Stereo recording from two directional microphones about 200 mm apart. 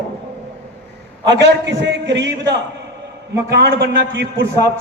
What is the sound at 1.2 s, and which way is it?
A man's voice, 60° right (ahead or behind).